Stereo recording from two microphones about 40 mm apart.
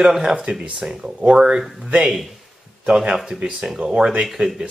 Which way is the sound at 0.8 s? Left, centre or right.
Centre.